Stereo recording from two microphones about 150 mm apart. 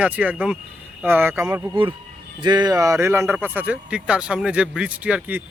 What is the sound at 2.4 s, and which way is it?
Speech, 30° right (ahead or behind).